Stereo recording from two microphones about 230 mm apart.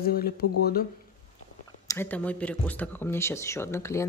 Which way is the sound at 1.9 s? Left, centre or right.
Centre.